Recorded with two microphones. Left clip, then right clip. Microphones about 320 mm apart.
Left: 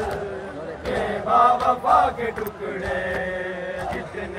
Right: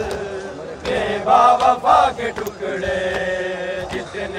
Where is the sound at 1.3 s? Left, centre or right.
Right.